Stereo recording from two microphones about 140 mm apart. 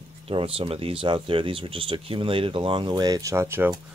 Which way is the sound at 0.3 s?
40° right (ahead or behind).